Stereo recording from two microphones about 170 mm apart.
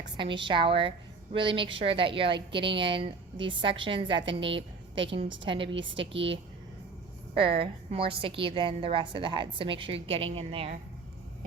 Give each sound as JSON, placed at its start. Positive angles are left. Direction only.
{"t": 0.2, "sound": "a woman's voice", "side_deg": -30}
{"t": 7.3, "sound": "a woman's voice", "side_deg": -30}